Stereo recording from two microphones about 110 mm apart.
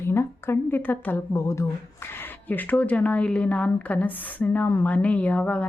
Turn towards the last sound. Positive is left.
turn(degrees=15)  # may be behind; listen again after turning